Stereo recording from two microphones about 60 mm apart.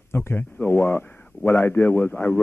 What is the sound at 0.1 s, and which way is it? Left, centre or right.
Speech, left.